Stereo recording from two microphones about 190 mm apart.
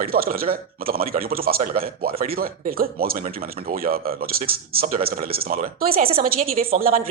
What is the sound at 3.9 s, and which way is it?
A woman's voice, 50° right (ahead or behind).